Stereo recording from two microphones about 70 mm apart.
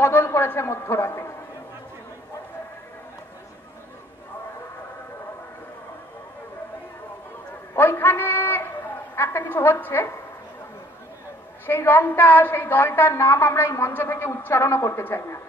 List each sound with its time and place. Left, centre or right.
0.0 s a woman's voice: left
7.7 s a sound: left
11.6 s a woman's voice: left
14.1 s a woman's voice: left